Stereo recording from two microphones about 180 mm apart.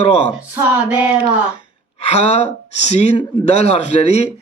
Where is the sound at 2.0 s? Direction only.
35° left (ahead or behind).